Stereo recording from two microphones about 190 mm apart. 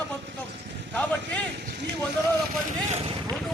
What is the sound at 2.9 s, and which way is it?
Speech, 30° right (ahead or behind).